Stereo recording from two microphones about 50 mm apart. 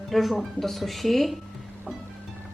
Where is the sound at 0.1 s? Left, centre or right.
Centre.